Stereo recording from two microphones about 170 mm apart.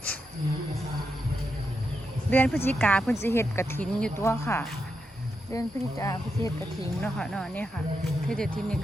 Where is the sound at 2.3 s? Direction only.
10° left (ahead or behind).